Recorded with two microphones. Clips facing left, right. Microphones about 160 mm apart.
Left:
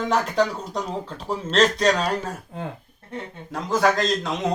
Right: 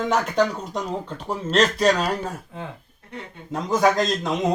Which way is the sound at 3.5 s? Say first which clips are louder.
Right 1 dB; 20° right (ahead or behind).